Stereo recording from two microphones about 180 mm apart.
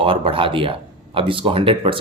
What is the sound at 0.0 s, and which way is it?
Speech, 30° right (ahead or behind).